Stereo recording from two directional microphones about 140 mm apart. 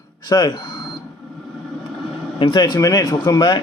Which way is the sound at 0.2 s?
30° left (ahead or behind).